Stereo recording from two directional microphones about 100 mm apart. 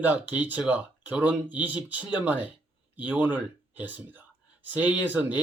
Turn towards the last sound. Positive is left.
turn(degrees=-15)  # may be behind; listen again after turning